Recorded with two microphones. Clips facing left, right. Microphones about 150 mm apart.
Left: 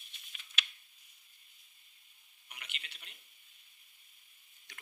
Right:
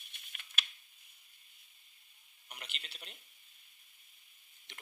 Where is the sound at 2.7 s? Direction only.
35° right (ahead or behind).